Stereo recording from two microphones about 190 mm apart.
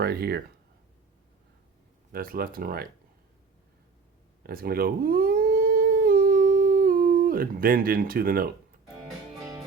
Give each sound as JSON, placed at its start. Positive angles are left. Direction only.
{"t": 0.0, "sound": "speech", "side_deg": -55}
{"t": 2.1, "sound": "speech", "side_deg": -50}
{"t": 4.4, "sound": "humming", "side_deg": -50}